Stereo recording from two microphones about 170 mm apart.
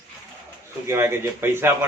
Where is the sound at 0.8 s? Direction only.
15° right (ahead or behind).